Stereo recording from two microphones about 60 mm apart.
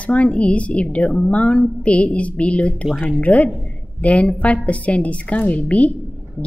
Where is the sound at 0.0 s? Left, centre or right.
Left.